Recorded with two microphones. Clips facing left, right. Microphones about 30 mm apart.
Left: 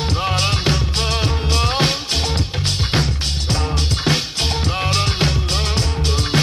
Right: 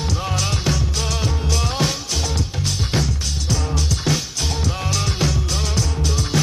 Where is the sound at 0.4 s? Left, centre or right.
Left.